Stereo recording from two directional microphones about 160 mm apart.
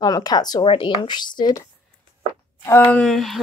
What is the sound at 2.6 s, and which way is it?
Speech, 10° left (ahead or behind).